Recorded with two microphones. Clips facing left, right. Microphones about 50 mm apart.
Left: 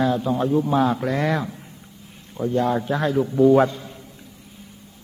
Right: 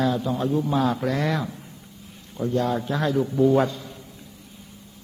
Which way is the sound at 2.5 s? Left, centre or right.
Left.